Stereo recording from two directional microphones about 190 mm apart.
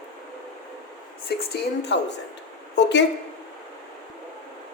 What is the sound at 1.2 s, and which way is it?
A woman's voice, 55° left (ahead or behind).